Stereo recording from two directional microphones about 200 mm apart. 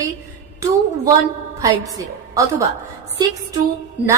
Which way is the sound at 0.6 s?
15° right (ahead or behind).